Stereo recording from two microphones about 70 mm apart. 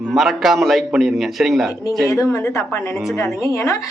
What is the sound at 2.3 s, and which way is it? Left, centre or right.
A woman's voice, left.